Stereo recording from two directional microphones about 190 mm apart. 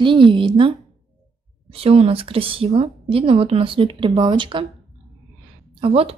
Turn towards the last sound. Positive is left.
turn(degrees=-30)  # may be behind; listen again after turning